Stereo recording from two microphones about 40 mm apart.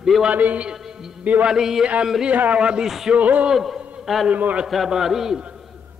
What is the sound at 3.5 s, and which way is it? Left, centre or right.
Speech, centre.